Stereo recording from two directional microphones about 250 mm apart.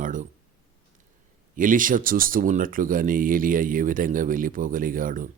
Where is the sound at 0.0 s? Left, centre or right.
Right.